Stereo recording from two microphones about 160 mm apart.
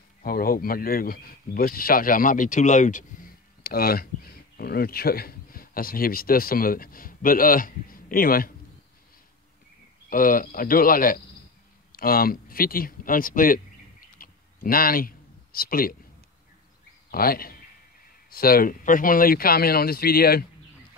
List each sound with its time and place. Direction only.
0.2 s speech: 65° left (ahead or behind)
10.0 s speech: 60° left (ahead or behind)
14.1 s a sound: 60° left (ahead or behind)
17.1 s a man's voice: 65° left (ahead or behind)